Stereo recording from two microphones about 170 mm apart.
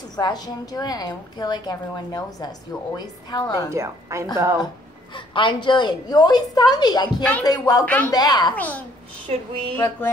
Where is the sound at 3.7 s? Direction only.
15° right (ahead or behind).